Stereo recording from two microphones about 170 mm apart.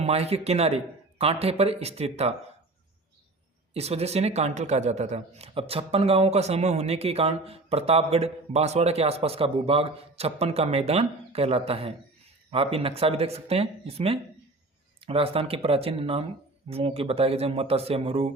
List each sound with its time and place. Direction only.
0.0 s a man's voice: 40° right (ahead or behind)
3.8 s a man's voice: 40° right (ahead or behind)